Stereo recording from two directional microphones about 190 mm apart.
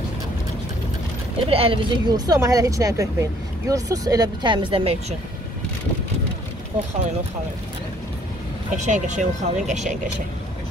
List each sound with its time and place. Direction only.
1.5 s speech: 30° right (ahead or behind)
8.7 s speech: 40° right (ahead or behind)